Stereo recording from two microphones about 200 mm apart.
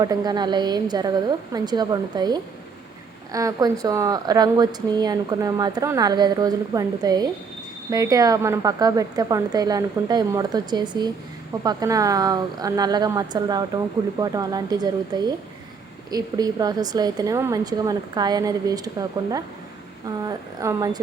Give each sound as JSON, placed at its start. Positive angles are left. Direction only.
{"t": 0.0, "sound": "a woman's voice", "side_deg": -20}